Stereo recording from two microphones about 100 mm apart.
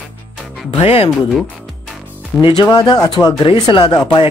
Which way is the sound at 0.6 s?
70° left (ahead or behind).